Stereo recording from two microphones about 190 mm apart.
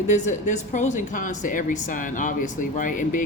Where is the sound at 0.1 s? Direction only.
40° left (ahead or behind).